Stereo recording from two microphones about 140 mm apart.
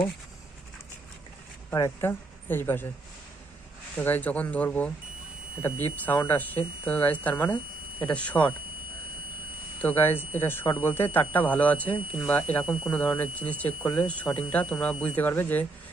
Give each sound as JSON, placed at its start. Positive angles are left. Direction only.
{"t": 1.7, "sound": "speech", "side_deg": 20}
{"t": 3.9, "sound": "speech", "side_deg": 15}
{"t": 9.8, "sound": "speech", "side_deg": 15}
{"t": 12.6, "sound": "speech", "side_deg": -5}
{"t": 12.9, "sound": "speech", "side_deg": 10}